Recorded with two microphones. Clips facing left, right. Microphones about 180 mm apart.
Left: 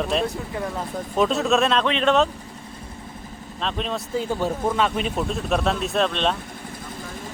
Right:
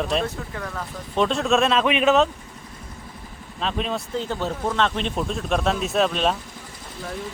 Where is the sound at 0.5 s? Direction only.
20° left (ahead or behind).